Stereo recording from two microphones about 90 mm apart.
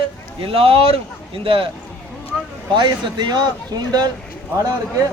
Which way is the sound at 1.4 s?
80° right.